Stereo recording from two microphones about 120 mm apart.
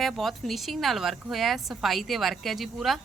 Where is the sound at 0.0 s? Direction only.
Centre (ahead or behind).